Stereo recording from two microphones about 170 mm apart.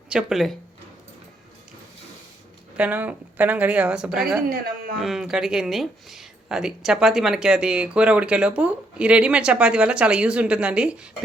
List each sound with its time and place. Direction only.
0.1 s speech: centre (ahead or behind)
2.7 s a woman's voice: 10° right (ahead or behind)
4.4 s speech: 60° right (ahead or behind)
4.9 s speech: centre (ahead or behind)